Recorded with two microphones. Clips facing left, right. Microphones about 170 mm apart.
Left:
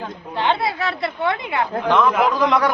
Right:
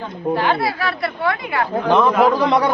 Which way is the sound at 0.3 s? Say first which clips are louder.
Left 1 dB; 25° left (ahead or behind).